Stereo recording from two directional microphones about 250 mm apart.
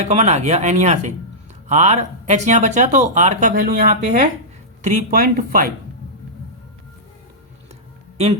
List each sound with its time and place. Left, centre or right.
0.0 s speech: right